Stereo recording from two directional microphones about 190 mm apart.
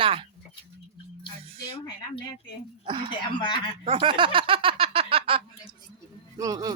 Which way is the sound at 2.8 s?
25° right (ahead or behind).